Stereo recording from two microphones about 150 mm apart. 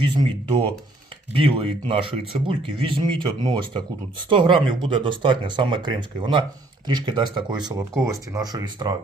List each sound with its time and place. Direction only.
0.0 s speech: 35° right (ahead or behind)
7.7 s speech: 20° right (ahead or behind)